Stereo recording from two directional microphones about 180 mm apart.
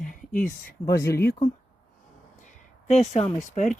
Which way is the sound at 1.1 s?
60° left (ahead or behind).